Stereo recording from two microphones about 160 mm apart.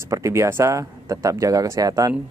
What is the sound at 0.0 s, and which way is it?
Speech, 15° right (ahead or behind).